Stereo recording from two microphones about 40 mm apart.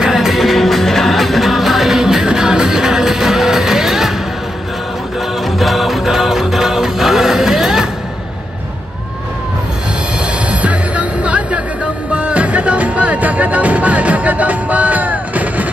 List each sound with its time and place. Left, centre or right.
0.0 s music: centre
0.3 s music: centre
5.6 s music: centre
10.5 s music: right